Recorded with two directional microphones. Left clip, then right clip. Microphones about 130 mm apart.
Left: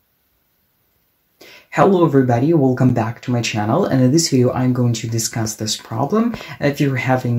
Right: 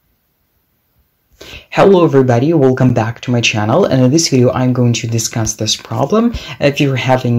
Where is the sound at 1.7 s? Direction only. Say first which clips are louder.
Right 5 dB; 15° right (ahead or behind).